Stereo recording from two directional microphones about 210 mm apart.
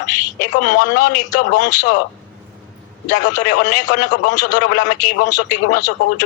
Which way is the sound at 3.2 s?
35° left (ahead or behind).